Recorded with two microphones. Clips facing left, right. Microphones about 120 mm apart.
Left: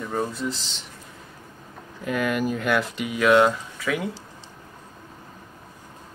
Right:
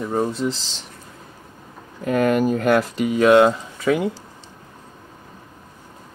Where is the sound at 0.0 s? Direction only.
25° right (ahead or behind).